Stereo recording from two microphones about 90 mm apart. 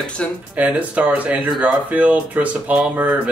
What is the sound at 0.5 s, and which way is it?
Speech, 15° right (ahead or behind).